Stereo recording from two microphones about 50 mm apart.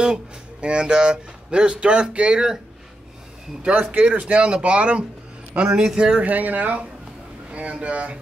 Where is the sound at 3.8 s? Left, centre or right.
Right.